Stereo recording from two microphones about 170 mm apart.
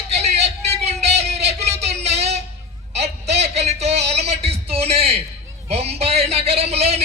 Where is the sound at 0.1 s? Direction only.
40° right (ahead or behind).